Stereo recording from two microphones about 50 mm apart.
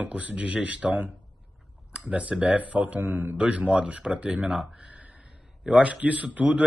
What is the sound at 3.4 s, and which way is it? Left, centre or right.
A man's voice, right.